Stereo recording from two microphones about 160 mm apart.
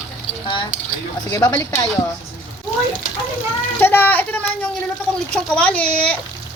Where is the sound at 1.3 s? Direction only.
20° left (ahead or behind).